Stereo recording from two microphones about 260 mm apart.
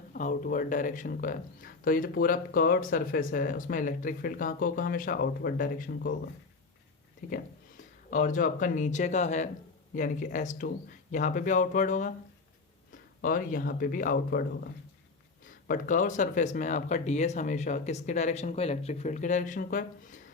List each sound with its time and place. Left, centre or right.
0.1 s speech: left
7.2 s speech: left